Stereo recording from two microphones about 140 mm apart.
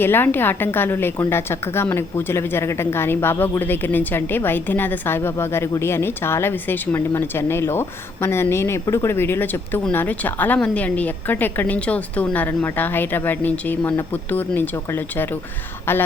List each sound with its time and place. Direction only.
0.0 s a woman's voice: 15° left (ahead or behind)